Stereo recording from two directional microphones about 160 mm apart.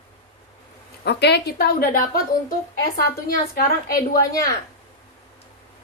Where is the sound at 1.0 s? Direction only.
90° left; by 2.0 s 70° left (ahead or behind).